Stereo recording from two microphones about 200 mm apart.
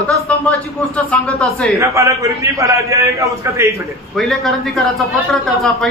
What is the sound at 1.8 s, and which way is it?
A man's voice, 15° right (ahead or behind).